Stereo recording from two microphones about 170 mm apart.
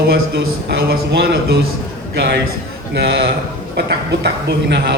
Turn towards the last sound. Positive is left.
turn(degrees=-75)  # may be behind; listen again after turning